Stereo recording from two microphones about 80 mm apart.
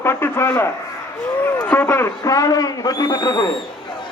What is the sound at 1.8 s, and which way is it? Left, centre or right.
Speech, left.